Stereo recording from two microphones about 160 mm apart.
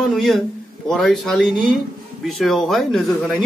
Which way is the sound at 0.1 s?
Centre (ahead or behind).